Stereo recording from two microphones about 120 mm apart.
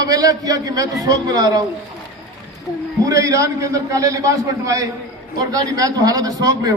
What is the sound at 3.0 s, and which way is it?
A man's voice, 25° right (ahead or behind).